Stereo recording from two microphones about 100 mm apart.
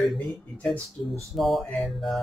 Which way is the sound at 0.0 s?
Centre (ahead or behind).